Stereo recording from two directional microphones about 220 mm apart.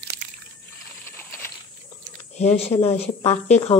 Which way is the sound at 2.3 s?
30° left (ahead or behind).